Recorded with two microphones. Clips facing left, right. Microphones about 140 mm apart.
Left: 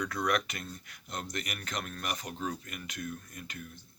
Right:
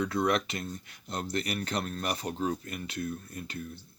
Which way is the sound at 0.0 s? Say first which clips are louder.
Right 4 dB; 25° right (ahead or behind).